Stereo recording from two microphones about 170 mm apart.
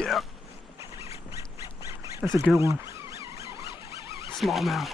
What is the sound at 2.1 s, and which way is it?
Speech, 25° left (ahead or behind).